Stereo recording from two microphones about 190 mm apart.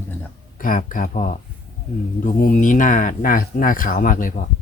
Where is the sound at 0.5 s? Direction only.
45° left (ahead or behind).